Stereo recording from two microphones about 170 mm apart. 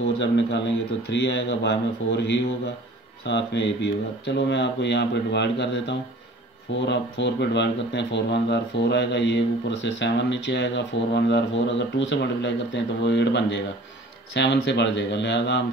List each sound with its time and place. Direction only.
0.2 s speech: 90° left